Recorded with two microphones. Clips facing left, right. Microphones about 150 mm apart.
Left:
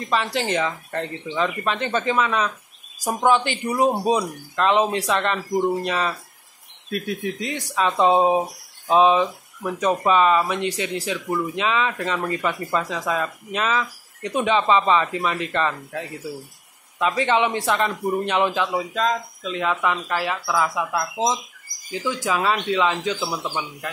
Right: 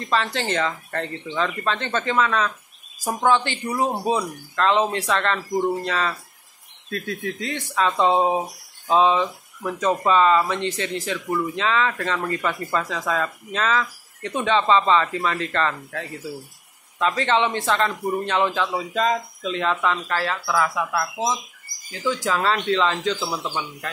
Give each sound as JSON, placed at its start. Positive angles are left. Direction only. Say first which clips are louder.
{"t": 0.1, "sound": "speech", "louder": "left 1 dB", "side_deg": 15}
{"t": 18.9, "sound": "speech", "louder": "right 5 dB", "side_deg": 0}